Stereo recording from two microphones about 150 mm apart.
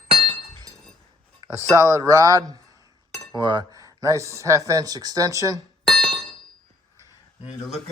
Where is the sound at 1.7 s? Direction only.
20° right (ahead or behind).